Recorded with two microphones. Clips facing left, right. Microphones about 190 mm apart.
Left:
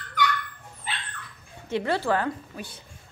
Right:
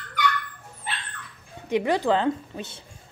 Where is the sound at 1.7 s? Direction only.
15° right (ahead or behind).